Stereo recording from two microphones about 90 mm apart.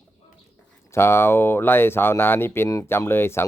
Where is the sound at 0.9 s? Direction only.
30° left (ahead or behind).